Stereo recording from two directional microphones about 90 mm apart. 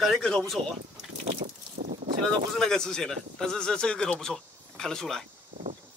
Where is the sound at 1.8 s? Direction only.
90° right.